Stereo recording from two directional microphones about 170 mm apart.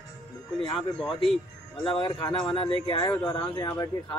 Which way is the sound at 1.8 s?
30° left (ahead or behind).